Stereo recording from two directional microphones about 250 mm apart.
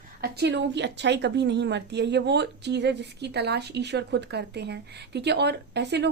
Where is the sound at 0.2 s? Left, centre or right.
Right.